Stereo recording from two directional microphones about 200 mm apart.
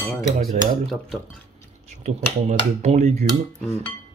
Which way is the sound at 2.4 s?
35° right (ahead or behind).